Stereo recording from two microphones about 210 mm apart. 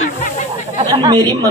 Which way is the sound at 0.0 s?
35° left (ahead or behind).